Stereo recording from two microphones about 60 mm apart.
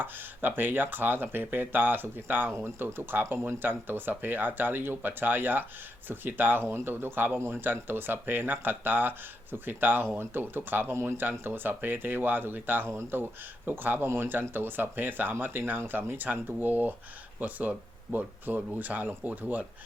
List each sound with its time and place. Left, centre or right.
0.0 s speech: right
2.5 s speech: right
2.8 s speech: right
10.9 s speech: right
11.2 s speech: right